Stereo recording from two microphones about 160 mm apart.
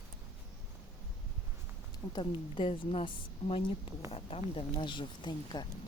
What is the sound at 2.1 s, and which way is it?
Speech, 30° left (ahead or behind).